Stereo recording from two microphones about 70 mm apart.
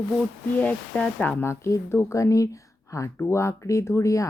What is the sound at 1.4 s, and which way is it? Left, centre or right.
Speech, left.